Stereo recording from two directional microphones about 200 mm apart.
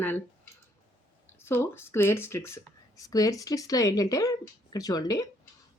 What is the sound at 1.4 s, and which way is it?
Speech, 10° left (ahead or behind).